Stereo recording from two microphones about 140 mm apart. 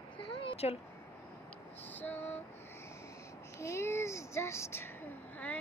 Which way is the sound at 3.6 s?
20° left (ahead or behind).